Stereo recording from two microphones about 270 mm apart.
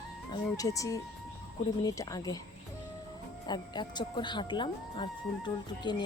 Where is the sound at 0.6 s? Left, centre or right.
Centre.